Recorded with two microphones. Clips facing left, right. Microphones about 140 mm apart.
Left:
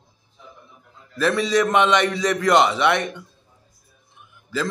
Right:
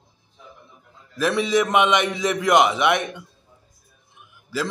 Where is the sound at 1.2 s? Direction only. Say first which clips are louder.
Left 1 dB; 15° right (ahead or behind).